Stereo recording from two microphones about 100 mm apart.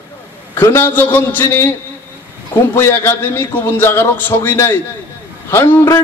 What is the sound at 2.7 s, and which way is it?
Speech, 25° left (ahead or behind).